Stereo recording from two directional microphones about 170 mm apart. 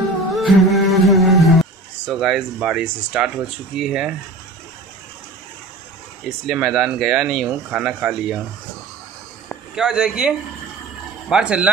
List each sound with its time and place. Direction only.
0.4 s a sound: centre (ahead or behind)
3.1 s speech: 5° right (ahead or behind)
6.2 s speech: 5° right (ahead or behind)
9.8 s speech: 5° right (ahead or behind)